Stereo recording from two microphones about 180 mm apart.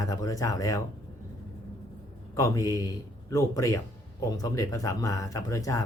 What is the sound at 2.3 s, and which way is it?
A man's voice, 20° left (ahead or behind).